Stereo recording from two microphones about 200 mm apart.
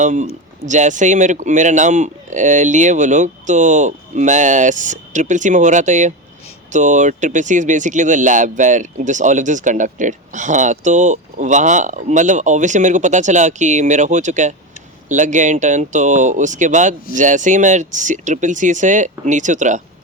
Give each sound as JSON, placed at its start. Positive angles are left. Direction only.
{"t": 0.0, "sound": "speech", "side_deg": -35}